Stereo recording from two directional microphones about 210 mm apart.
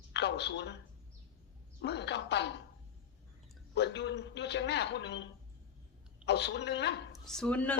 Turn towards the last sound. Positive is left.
turn(degrees=5)  # may be behind; listen again after turning